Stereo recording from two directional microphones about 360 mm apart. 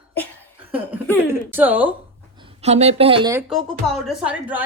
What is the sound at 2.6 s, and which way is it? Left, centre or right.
Speech, centre.